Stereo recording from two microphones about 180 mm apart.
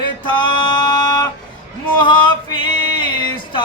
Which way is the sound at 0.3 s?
25° left (ahead or behind).